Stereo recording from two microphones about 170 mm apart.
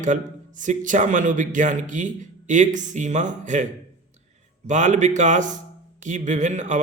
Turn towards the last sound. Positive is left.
turn(degrees=-45)  # may be behind; listen again after turning